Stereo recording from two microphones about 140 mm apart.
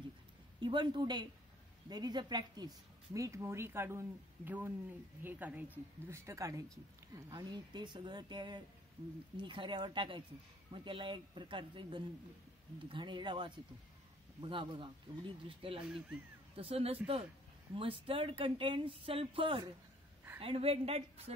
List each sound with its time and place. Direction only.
0.6 s speech: 35° right (ahead or behind)
15.8 s speech: 5° right (ahead or behind)
16.5 s a woman's voice: 45° right (ahead or behind)